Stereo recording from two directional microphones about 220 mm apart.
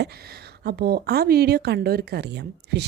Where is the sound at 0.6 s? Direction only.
45° right (ahead or behind).